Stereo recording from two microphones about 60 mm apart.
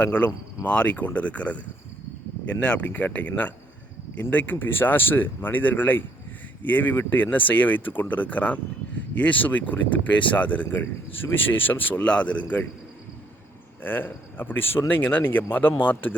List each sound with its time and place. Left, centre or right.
0.0 s speech: left
12.0 s speech: centre
13.8 s speech: left